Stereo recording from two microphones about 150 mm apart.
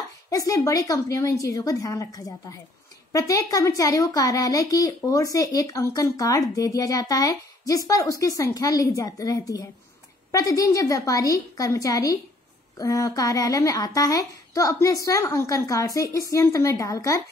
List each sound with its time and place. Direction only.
0.3 s speech: 20° left (ahead or behind)